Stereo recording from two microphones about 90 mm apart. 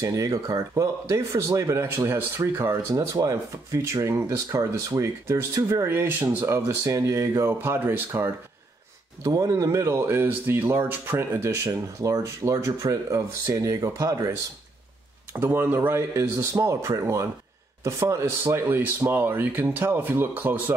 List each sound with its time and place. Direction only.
0.0 s speech: 40° right (ahead or behind)
3.2 s speech: 35° right (ahead or behind)
5.9 s speech: 25° right (ahead or behind)
9.2 s speech: 40° right (ahead or behind)
15.3 s speech: 25° right (ahead or behind)